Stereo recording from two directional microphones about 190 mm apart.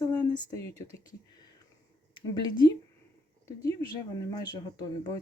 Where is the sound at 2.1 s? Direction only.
20° left (ahead or behind).